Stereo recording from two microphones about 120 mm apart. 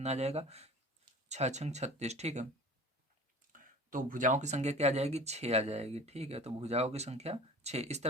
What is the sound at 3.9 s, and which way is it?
Speech, 90° right.